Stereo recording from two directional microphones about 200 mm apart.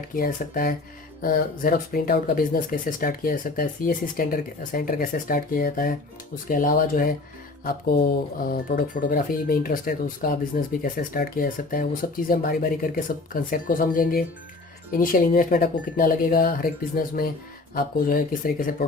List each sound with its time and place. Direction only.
0.2 s speech: 45° left (ahead or behind)